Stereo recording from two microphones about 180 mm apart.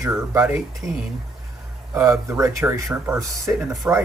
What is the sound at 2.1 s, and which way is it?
Speech, 15° right (ahead or behind).